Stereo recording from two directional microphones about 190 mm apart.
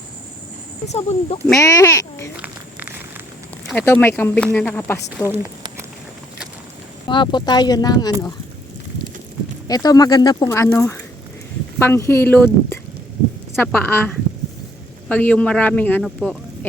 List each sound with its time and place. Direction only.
0.9 s speech: 35° left (ahead or behind)
1.5 s a child's voice: 15° left (ahead or behind)
2.3 s a sound: 10° right (ahead or behind)
3.7 s speech: 10° left (ahead or behind)
5.4 s a sound: 15° right (ahead or behind)
7.1 s speech: 25° left (ahead or behind)
9.6 s speech: 20° left (ahead or behind)
15.1 s speech: 10° left (ahead or behind)